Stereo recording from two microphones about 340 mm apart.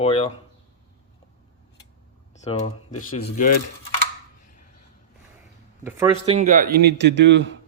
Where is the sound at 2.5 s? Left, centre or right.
Centre.